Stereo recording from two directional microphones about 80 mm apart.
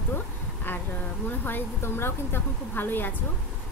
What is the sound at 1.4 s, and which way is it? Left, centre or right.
A woman's voice, left.